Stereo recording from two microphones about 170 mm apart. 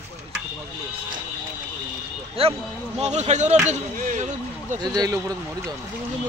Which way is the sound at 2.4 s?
35° right (ahead or behind).